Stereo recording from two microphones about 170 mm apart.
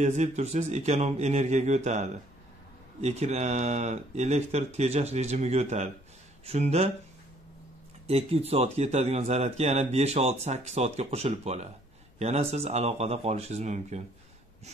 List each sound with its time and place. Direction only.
0.0 s speech: 45° right (ahead or behind)
8.1 s speech: 35° right (ahead or behind)